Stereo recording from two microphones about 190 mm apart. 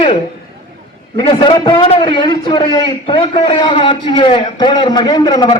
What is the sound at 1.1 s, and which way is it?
A man's voice, 25° left (ahead or behind).